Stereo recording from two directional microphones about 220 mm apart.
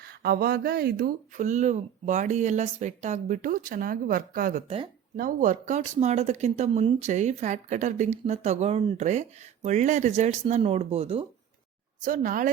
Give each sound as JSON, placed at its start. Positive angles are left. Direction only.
{"t": 0.0, "sound": "speech", "side_deg": -45}